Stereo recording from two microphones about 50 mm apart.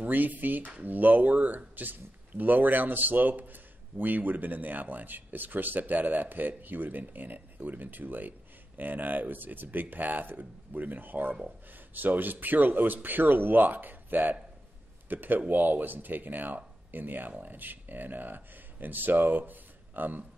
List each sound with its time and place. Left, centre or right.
0.0 s speech: right